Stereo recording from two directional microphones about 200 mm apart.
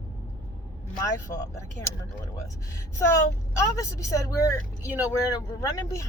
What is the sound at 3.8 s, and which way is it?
Speech, 15° left (ahead or behind).